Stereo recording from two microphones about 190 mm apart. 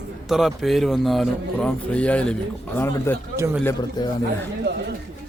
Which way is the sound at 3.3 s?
15° right (ahead or behind).